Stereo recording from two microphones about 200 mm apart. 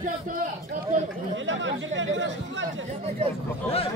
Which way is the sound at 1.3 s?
65° right (ahead or behind).